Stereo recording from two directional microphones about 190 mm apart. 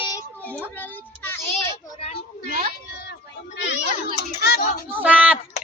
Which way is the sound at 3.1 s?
65° left (ahead or behind).